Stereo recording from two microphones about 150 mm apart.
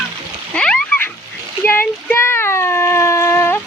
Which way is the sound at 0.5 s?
5° left (ahead or behind).